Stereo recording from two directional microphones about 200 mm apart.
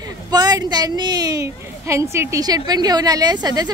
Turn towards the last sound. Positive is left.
turn(degrees=-20)  # may be behind; listen again after turning